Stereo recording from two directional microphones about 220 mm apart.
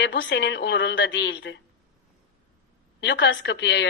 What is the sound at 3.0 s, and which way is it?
Speech, 55° left (ahead or behind).